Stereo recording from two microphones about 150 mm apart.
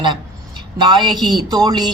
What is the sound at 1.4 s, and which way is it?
Speech, 25° right (ahead or behind).